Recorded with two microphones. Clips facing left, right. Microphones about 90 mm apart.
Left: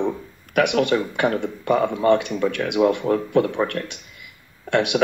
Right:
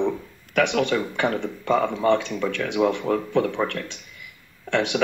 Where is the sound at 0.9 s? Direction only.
20° left (ahead or behind).